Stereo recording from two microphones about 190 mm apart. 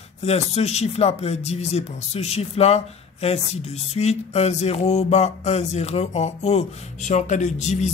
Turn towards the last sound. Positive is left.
turn(degrees=35)  # may be behind; listen again after turning